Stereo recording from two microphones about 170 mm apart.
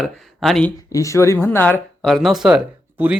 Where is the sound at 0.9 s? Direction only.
20° left (ahead or behind).